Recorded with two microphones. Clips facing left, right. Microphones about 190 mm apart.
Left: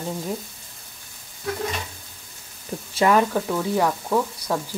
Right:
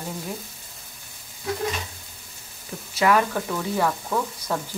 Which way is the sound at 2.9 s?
25° left (ahead or behind).